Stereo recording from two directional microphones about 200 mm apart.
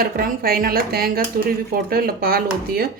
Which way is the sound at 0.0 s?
45° right (ahead or behind).